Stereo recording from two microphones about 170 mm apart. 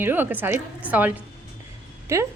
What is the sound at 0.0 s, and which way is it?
A woman's voice, 10° right (ahead or behind).